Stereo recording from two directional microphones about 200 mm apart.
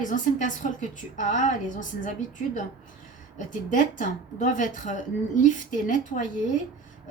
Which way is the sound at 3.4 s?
40° left (ahead or behind).